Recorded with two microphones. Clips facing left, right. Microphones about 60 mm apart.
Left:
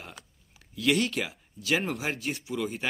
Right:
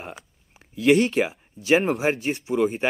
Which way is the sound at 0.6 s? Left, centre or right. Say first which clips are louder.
Right 8 dB; right.